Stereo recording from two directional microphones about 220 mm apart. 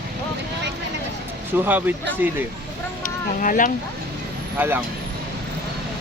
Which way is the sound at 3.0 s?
35° left (ahead or behind).